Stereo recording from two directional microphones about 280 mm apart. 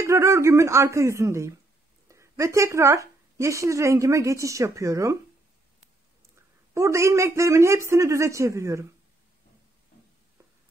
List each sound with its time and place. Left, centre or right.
0.0 s a woman's voice: centre
6.3 s a man's voice: centre